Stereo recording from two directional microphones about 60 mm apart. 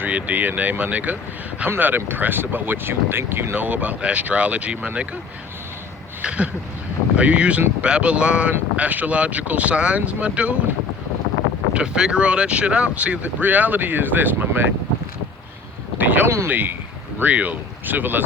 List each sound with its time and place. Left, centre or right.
0.0 s speech: right
6.2 s speech: right
11.7 s speech: centre; by 14.7 s right
16.0 s speech: right